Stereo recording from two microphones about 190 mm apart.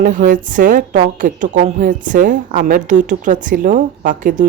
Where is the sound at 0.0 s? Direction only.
45° right (ahead or behind).